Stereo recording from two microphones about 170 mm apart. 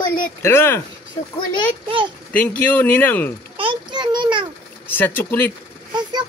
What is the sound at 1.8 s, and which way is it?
Speech, 30° right (ahead or behind).